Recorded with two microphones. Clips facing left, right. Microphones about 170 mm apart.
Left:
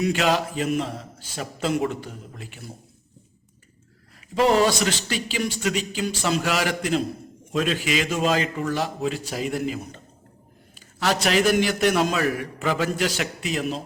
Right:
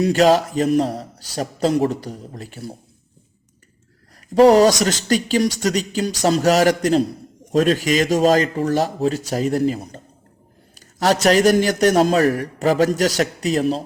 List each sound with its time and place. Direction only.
0.0 s a man's voice: 40° right (ahead or behind)
4.4 s a man's voice: 40° right (ahead or behind)